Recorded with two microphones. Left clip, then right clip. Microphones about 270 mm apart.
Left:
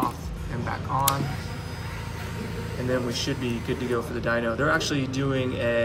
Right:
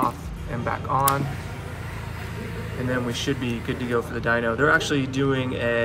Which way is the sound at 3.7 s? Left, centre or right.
Right.